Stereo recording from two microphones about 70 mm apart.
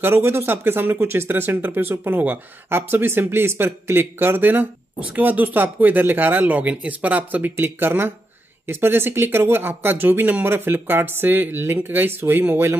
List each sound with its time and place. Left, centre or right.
0.0 s speech: right